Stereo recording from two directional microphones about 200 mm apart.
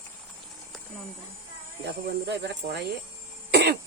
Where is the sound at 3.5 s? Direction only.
55° right (ahead or behind).